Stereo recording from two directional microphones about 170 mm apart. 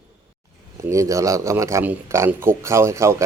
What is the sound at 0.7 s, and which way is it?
A man's voice, 15° right (ahead or behind).